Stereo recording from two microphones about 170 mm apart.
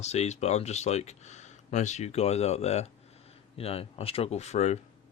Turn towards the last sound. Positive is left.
turn(degrees=40)  # may be behind; listen again after turning